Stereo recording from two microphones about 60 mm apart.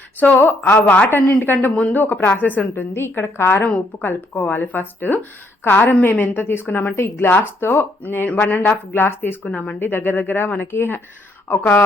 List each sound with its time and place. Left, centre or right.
0.2 s speech: left
2.9 s a woman's voice: left
3.6 s speech: left